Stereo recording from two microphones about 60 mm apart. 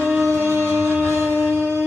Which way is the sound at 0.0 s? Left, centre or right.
Right.